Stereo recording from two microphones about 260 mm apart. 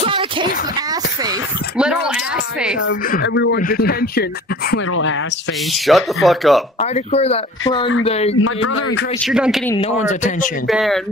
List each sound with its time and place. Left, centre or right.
0.0 s a sound: centre
3.1 s speech: left
5.9 s speech: centre
6.8 s speech: left
8.4 s speech: left
9.2 s speech: centre
9.8 s speech: left
10.7 s speech: centre